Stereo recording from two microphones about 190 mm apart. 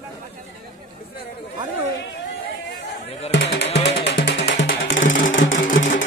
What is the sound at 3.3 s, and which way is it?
Music, 65° left (ahead or behind).